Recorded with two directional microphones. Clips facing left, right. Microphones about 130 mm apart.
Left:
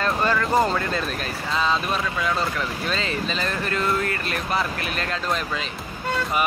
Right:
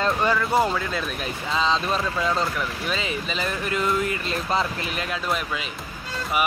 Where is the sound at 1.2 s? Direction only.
15° right (ahead or behind).